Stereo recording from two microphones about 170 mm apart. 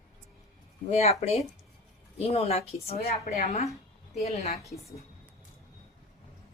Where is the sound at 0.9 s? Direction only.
40° left (ahead or behind).